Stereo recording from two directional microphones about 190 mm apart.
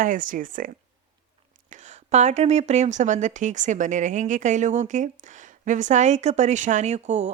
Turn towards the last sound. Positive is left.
turn(degrees=-35)  # may be behind; listen again after turning